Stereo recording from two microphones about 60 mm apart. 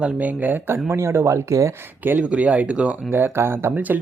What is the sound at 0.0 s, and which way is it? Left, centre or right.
Speech, right.